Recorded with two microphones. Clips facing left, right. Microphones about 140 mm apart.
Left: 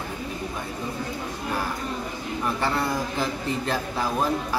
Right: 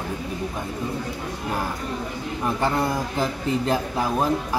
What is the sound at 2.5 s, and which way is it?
Speech, 15° right (ahead or behind).